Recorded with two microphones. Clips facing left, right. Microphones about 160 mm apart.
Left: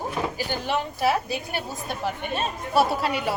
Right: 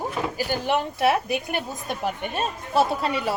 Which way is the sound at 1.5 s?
15° right (ahead or behind).